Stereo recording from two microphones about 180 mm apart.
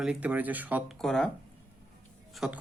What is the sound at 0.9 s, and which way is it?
Speech, centre (ahead or behind).